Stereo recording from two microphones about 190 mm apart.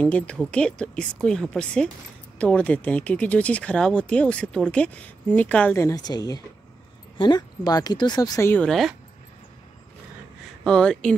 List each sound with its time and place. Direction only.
0.0 s speech: 5° left (ahead or behind)
10.6 s speech: 5° left (ahead or behind)